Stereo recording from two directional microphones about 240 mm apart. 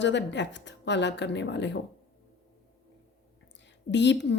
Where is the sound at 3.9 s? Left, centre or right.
Left.